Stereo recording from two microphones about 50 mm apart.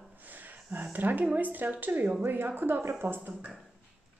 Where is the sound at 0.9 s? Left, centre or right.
Right.